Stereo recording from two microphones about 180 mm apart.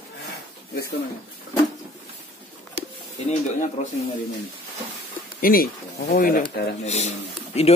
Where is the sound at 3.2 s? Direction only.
45° left (ahead or behind).